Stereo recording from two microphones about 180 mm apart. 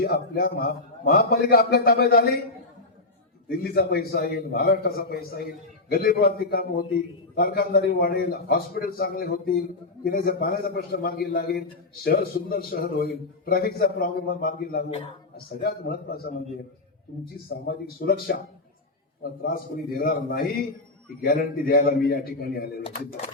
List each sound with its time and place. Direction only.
0.0 s a man's voice: 55° left (ahead or behind)
3.6 s a man's voice: 60° left (ahead or behind)
17.7 s a man's voice: 55° left (ahead or behind)